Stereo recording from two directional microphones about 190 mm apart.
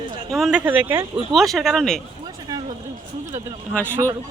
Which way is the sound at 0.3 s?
5° right (ahead or behind).